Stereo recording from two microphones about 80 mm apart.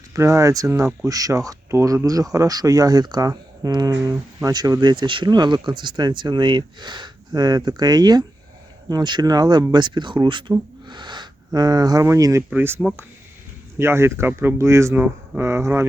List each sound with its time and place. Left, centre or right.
0.1 s speech: right
10.8 s a sound: right
12.0 s speech: right
12.5 s speech: right